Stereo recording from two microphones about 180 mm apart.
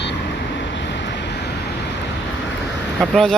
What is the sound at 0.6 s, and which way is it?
Vehicle, 75° left (ahead or behind).